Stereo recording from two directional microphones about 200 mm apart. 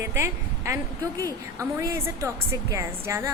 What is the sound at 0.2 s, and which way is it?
A woman's voice, 15° right (ahead or behind).